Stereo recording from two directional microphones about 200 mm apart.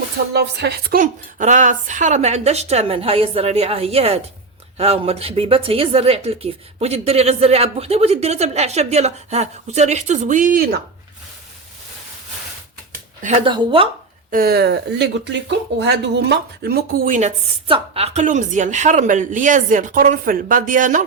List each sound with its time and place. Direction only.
0.3 s speech: 55° right (ahead or behind)
13.2 s speech: 30° right (ahead or behind)
14.3 s speech: 45° right (ahead or behind)
17.2 s speech: 30° right (ahead or behind)